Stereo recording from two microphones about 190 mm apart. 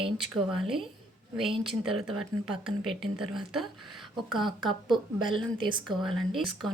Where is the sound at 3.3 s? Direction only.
Centre (ahead or behind).